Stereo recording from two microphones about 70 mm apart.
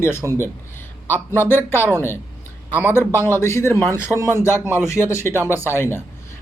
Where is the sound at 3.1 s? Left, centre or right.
Left.